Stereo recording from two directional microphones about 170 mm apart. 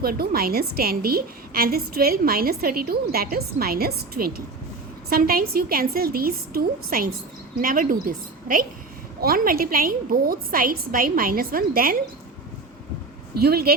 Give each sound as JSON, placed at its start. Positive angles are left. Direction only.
{"t": 0.0, "sound": "a woman's voice", "side_deg": -60}
{"t": 13.4, "sound": "a woman's voice", "side_deg": -65}